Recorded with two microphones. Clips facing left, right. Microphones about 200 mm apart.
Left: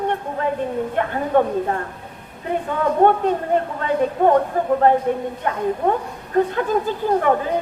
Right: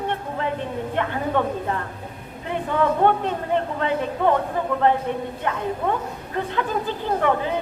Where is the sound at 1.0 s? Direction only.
45° left (ahead or behind).